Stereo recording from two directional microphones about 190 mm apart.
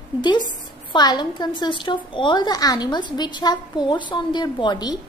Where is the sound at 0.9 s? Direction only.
20° left (ahead or behind).